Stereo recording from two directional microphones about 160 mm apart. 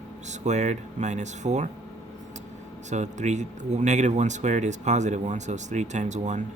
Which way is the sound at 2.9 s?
45° right (ahead or behind).